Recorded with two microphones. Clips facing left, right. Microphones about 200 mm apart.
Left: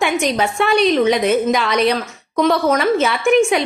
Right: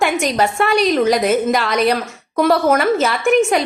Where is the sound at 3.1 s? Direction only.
45° right (ahead or behind).